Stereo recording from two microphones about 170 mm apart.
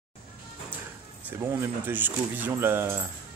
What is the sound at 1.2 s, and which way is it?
Speech, 15° right (ahead or behind).